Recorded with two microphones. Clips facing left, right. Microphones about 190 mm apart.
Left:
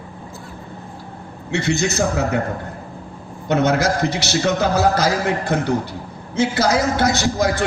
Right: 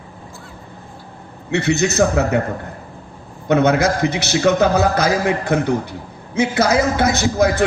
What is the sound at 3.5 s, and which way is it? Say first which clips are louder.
A man's voice: right 3 dB; 55° right (ahead or behind).